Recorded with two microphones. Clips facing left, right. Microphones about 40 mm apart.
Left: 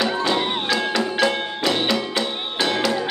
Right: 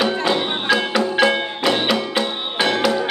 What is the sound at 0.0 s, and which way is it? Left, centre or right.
Music, right.